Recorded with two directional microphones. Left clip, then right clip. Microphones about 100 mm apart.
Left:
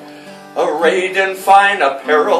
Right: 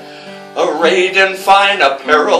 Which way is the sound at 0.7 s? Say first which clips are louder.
Right 4 dB; 20° right (ahead or behind).